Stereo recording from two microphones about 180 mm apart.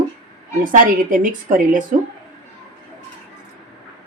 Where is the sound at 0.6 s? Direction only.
45° right (ahead or behind).